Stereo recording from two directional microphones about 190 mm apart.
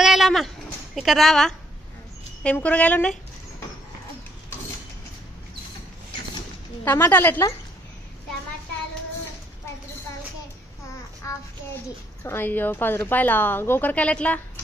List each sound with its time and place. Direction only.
0.0 s a sound: centre (ahead or behind)
0.9 s a woman's voice: centre (ahead or behind)
6.8 s speech: 10° left (ahead or behind)
12.2 s speech: 10° left (ahead or behind)